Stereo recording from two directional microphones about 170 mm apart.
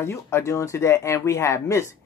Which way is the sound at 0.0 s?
15° left (ahead or behind).